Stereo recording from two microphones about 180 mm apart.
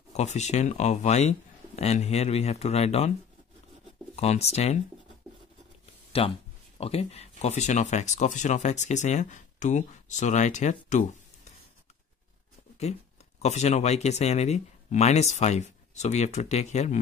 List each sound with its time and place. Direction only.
0.1 s speech: 40° left (ahead or behind)
4.1 s speech: 35° left (ahead or behind)
6.1 s speech: 30° left (ahead or behind)
13.4 s speech: 40° left (ahead or behind)